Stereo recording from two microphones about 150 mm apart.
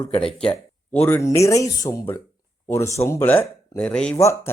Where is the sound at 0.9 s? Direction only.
10° left (ahead or behind).